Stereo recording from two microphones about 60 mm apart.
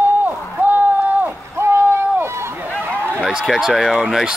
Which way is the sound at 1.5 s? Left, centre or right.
Right.